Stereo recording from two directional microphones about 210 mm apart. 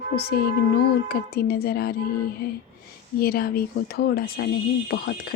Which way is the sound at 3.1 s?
45° left (ahead or behind).